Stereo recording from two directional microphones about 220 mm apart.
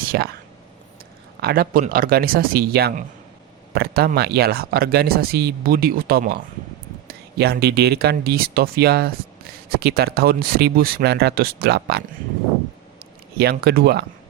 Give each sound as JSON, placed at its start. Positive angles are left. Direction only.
{"t": 0.0, "sound": "speech", "side_deg": -45}
{"t": 1.4, "sound": "speech", "side_deg": -45}
{"t": 13.4, "sound": "speech", "side_deg": -45}